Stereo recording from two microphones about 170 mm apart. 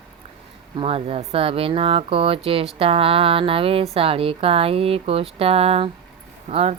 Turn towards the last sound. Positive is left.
turn(degrees=-40)  # may be behind; listen again after turning